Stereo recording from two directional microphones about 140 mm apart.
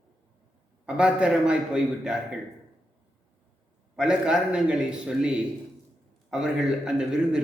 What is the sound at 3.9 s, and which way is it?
A man's voice, 5° right (ahead or behind).